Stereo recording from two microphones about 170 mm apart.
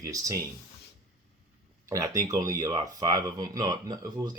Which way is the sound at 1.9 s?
20° right (ahead or behind).